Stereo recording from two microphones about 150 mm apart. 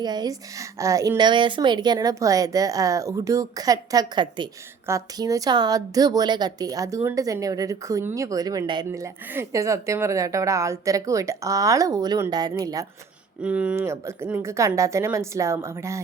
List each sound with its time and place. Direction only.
0.0 s a woman's voice: 25° right (ahead or behind)
8.9 s a woman's voice: 15° right (ahead or behind)
13.4 s a woman's voice: 10° right (ahead or behind)